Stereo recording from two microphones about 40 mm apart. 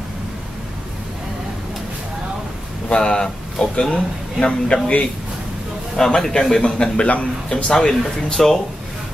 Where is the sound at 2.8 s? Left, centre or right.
Left.